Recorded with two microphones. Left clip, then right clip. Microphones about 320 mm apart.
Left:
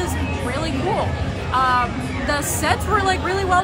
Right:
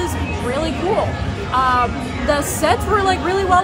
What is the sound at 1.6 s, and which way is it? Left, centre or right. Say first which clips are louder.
Music: right 2 dB; centre.